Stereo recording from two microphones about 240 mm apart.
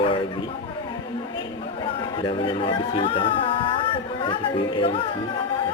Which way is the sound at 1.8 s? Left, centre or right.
Left.